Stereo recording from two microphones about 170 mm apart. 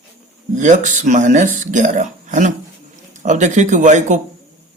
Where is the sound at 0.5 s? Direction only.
45° right (ahead or behind).